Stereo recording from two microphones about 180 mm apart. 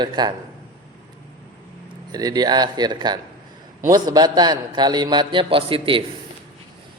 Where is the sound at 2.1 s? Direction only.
20° right (ahead or behind).